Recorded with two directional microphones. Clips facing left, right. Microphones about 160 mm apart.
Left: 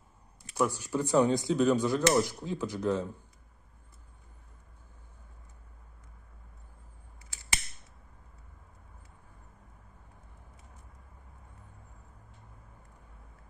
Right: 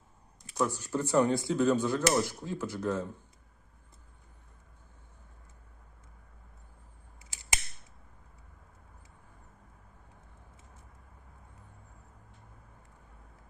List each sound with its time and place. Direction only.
0.6 s speech: 10° left (ahead or behind)